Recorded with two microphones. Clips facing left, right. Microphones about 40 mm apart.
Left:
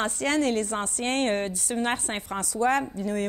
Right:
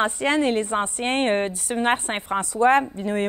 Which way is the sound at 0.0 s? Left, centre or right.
Right.